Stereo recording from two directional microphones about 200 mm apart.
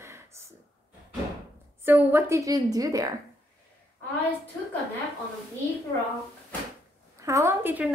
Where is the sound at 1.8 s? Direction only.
10° right (ahead or behind).